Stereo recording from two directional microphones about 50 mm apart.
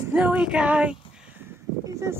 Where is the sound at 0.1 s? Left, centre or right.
Centre.